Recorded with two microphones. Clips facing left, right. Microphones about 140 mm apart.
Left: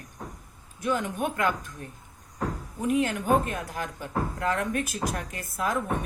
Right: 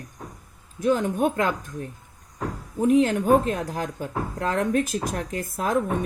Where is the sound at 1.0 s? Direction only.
30° right (ahead or behind).